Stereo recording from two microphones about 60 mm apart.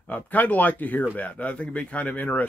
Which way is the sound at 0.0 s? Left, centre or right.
Left.